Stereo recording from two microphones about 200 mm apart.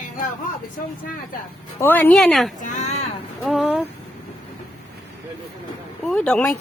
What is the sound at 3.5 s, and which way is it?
Speech, centre (ahead or behind).